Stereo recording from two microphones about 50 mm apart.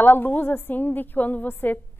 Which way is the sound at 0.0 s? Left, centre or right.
Left.